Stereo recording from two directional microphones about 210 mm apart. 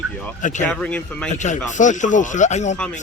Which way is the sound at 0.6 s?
5° left (ahead or behind).